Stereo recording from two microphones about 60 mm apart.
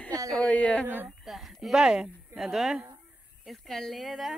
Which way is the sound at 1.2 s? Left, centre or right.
Centre.